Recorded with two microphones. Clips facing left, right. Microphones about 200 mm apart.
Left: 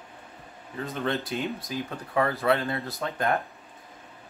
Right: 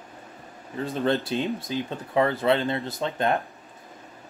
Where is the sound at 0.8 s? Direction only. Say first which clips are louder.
Right 5 dB; 30° right (ahead or behind).